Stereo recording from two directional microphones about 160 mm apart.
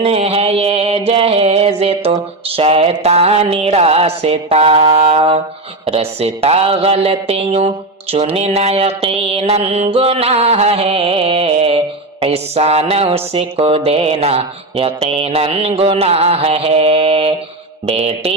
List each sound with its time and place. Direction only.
0.0 s mantra: 40° right (ahead or behind)
2.6 s music: 40° right (ahead or behind)